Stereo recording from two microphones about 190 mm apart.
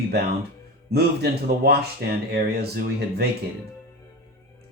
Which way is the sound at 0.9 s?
55° right (ahead or behind).